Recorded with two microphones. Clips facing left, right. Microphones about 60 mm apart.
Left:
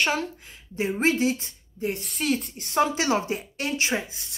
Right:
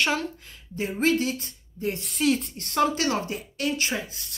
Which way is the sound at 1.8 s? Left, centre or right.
Centre.